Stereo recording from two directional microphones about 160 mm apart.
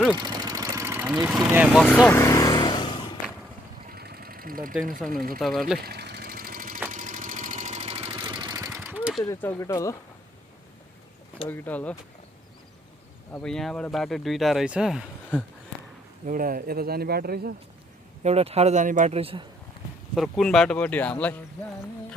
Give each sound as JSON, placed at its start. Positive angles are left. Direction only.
{"t": 0.2, "sound": "engine", "side_deg": -25}
{"t": 1.1, "sound": "speech", "side_deg": -5}
{"t": 2.0, "sound": "vehicle", "side_deg": 20}
{"t": 3.8, "sound": "sewing machine", "side_deg": -75}
{"t": 4.9, "sound": "speech", "side_deg": 0}
{"t": 5.8, "sound": "engine", "side_deg": -90}
{"t": 8.3, "sound": "vehicle", "side_deg": -25}
{"t": 9.3, "sound": "speech", "side_deg": 15}
{"t": 11.4, "sound": "speech", "side_deg": 10}
{"t": 13.3, "sound": "speech", "side_deg": 5}
{"t": 16.2, "sound": "speech", "side_deg": -60}
{"t": 18.2, "sound": "speech", "side_deg": -40}
{"t": 20.1, "sound": "speech", "side_deg": 0}